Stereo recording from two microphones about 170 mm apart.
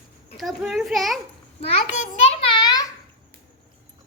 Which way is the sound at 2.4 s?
25° left (ahead or behind).